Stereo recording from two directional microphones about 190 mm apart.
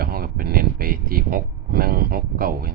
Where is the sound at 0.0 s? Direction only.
50° right (ahead or behind).